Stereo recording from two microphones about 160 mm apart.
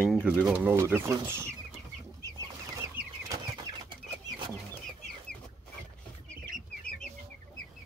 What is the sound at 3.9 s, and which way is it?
Chicken, 25° right (ahead or behind).